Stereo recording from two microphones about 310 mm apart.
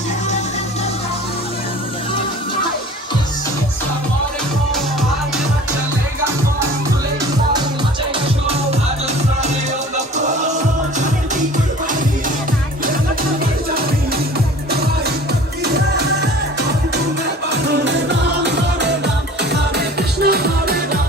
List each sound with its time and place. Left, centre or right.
10.2 s music: right
15.6 s music: right